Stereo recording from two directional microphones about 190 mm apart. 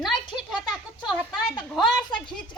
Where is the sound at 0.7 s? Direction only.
Centre (ahead or behind).